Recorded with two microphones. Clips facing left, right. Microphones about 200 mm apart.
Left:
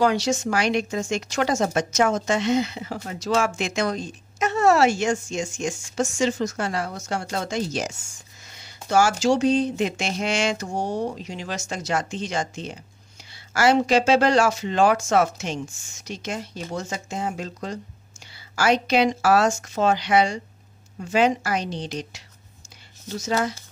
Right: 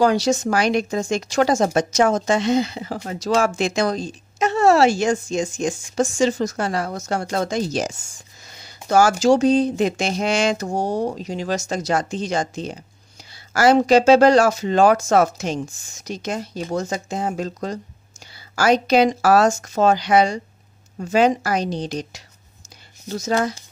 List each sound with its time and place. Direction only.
0.0 s speech: 40° right (ahead or behind)
8.5 s a sound: 40° right (ahead or behind)
9.2 s speech: 40° right (ahead or behind)
23.0 s speech: 40° right (ahead or behind)